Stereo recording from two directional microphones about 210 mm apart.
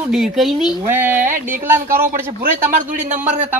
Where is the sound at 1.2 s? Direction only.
40° right (ahead or behind).